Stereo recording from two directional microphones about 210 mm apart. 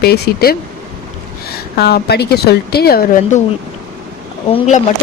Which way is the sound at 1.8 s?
50° left (ahead or behind).